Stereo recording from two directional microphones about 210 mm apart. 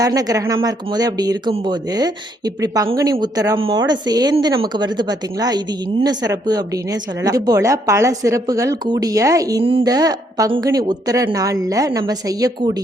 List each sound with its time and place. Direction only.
0.0 s a woman's voice: 15° right (ahead or behind)